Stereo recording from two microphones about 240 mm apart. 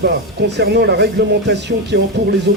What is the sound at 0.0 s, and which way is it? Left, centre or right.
Speech, right.